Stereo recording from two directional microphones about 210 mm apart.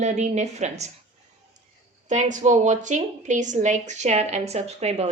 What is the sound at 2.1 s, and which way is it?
Speech, 35° right (ahead or behind).